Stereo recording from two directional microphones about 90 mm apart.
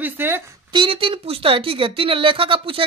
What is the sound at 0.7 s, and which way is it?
A woman's voice, 80° right.